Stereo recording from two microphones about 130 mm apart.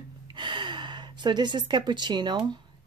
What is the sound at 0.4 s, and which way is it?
Speech, 35° right (ahead or behind).